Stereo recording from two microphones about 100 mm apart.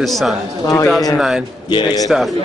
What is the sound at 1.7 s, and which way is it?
Speech, 45° left (ahead or behind).